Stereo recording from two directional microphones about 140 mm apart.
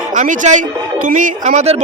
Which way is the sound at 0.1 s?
65° right (ahead or behind).